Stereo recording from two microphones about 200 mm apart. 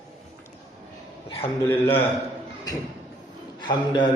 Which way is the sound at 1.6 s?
10° left (ahead or behind).